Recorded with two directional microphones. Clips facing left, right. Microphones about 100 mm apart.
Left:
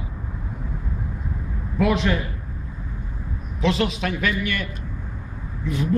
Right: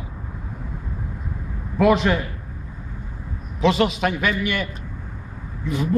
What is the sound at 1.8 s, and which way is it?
Speech, 60° right (ahead or behind).